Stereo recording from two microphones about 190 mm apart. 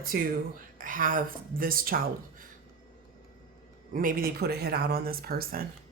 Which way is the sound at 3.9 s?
50° right (ahead or behind).